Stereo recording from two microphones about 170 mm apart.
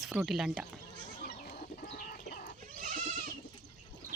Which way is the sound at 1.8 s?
60° left (ahead or behind).